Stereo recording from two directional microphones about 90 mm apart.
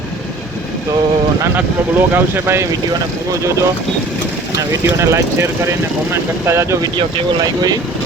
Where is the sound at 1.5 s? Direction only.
25° right (ahead or behind).